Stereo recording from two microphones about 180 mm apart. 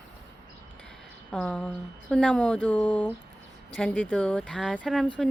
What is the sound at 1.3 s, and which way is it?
Speech, 5° left (ahead or behind).